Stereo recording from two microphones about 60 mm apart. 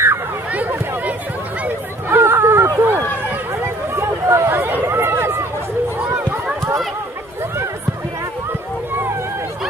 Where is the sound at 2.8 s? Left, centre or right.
Right.